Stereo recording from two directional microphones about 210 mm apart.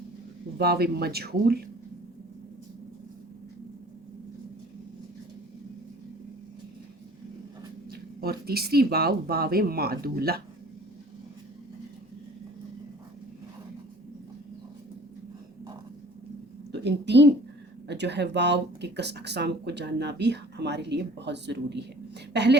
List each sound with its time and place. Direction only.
0.6 s speech: 50° right (ahead or behind)
7.9 s speech: 45° right (ahead or behind)
16.7 s a woman's voice: 55° right (ahead or behind)